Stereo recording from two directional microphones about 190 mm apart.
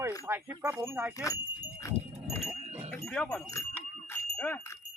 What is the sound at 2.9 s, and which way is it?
Speech, 5° left (ahead or behind).